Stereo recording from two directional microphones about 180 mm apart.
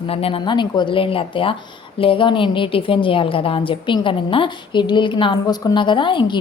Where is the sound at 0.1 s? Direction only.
30° left (ahead or behind).